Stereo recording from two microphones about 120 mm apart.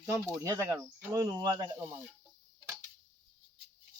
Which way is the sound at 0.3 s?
25° right (ahead or behind).